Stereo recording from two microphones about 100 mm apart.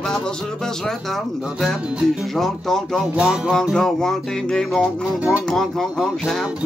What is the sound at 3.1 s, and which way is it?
Music, 10° right (ahead or behind).